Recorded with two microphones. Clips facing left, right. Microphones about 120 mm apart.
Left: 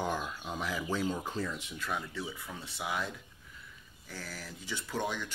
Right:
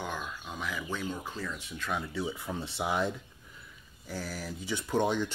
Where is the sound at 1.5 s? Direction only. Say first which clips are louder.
Right 2 dB; 5° left (ahead or behind).